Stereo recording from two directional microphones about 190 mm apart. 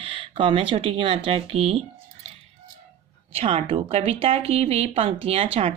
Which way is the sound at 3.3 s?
30° right (ahead or behind).